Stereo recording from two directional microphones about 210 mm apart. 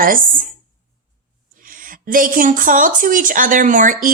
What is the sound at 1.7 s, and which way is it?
A woman's voice, 40° right (ahead or behind).